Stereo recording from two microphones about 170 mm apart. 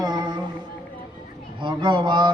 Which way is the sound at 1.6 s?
25° right (ahead or behind).